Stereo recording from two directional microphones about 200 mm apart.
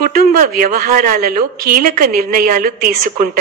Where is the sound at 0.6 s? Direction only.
45° right (ahead or behind).